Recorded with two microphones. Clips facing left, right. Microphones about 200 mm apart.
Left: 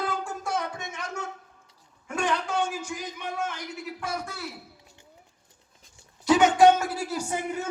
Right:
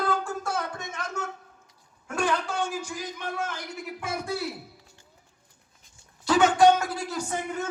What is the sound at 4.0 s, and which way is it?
Speech, 30° right (ahead or behind).